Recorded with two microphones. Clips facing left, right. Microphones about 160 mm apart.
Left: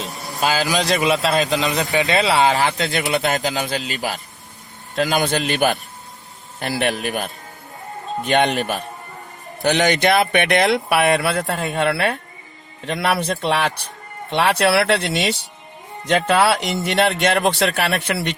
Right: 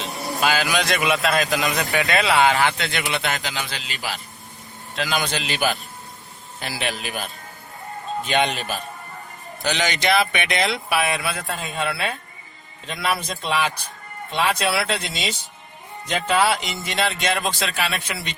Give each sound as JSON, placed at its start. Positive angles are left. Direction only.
{"t": 0.5, "sound": "a man's voice", "side_deg": 35}